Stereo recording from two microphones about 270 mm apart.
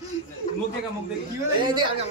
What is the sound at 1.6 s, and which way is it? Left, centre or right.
Speech, centre.